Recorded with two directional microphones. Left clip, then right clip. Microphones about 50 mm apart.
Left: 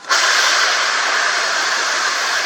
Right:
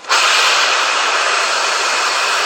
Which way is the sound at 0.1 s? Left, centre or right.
Centre.